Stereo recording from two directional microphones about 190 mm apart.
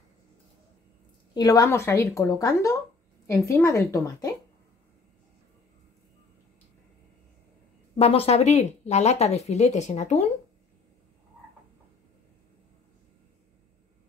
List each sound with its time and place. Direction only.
1.3 s speech: 20° left (ahead or behind)
7.9 s speech: 30° left (ahead or behind)